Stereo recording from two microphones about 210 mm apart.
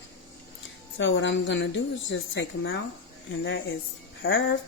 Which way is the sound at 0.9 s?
60° left (ahead or behind).